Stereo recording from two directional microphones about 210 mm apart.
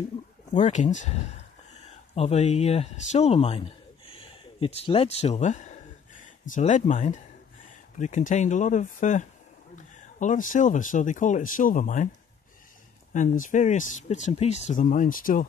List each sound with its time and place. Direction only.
0.5 s speech: 35° left (ahead or behind)
13.1 s speech: 35° left (ahead or behind)